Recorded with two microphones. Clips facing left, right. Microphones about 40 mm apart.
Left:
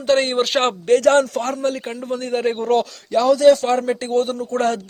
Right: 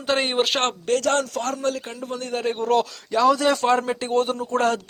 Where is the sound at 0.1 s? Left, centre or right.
Centre.